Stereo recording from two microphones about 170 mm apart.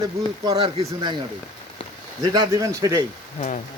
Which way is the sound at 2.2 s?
25° right (ahead or behind).